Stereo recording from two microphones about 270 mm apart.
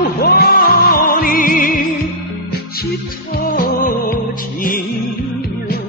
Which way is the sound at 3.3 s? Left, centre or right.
Left.